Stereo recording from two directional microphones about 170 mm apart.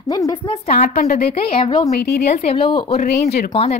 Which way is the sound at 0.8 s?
55° left (ahead or behind).